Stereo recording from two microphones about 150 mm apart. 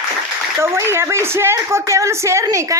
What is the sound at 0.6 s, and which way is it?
A woman's voice, 15° right (ahead or behind).